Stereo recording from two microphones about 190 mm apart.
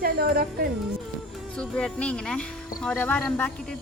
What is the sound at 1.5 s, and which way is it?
Speech, 5° left (ahead or behind).